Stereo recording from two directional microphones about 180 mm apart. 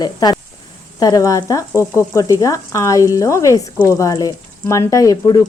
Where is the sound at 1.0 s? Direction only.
20° left (ahead or behind).